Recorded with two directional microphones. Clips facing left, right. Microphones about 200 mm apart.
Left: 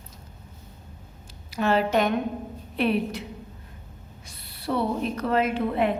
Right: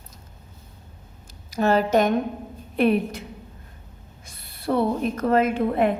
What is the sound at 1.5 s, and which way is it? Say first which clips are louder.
A woman's voice: right 3 dB; 40° right (ahead or behind).